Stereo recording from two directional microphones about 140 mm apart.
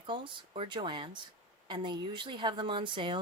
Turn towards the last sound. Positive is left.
turn(degrees=-35)  # may be behind; listen again after turning